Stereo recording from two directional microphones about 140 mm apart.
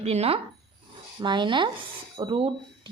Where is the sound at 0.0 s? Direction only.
50° right (ahead or behind).